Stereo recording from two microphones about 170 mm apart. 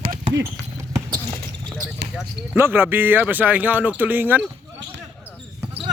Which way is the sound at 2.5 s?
10° right (ahead or behind).